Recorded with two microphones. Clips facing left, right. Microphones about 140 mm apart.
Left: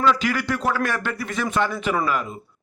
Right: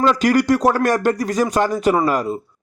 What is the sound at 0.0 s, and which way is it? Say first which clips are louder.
A man's voice: right 6 dB; 40° right (ahead or behind).